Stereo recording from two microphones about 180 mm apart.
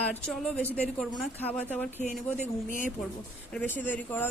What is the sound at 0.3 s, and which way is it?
Speech, 5° left (ahead or behind).